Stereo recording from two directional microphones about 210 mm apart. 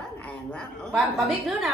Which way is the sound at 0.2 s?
5° left (ahead or behind).